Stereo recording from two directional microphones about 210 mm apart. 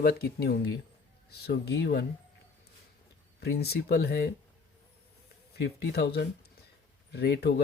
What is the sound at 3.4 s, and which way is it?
Speech, 50° left (ahead or behind).